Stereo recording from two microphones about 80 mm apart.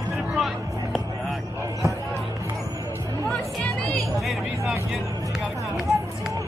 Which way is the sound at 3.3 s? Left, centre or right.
Centre.